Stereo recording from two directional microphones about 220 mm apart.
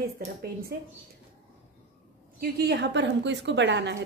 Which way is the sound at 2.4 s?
50° right (ahead or behind).